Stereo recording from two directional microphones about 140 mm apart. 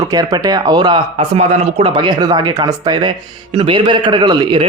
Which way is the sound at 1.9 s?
30° right (ahead or behind).